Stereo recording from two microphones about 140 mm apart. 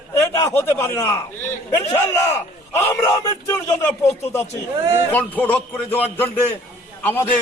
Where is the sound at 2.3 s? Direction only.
20° left (ahead or behind).